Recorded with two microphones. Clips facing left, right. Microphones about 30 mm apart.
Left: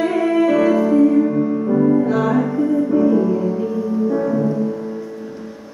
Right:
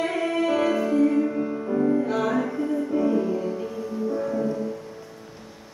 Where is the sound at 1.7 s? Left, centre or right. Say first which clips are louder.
Left 6 dB; left.